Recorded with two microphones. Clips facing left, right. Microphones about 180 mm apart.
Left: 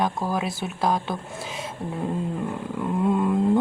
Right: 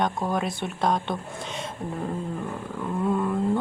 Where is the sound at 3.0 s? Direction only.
15° left (ahead or behind).